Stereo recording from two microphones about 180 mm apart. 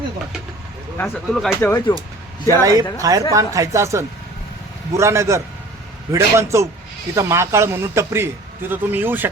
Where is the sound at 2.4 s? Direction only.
20° right (ahead or behind).